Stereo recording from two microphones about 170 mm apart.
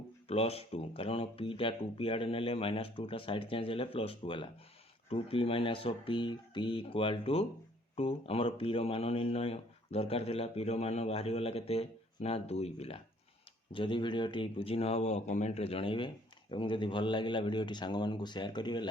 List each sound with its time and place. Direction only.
0.3 s speech: 35° left (ahead or behind)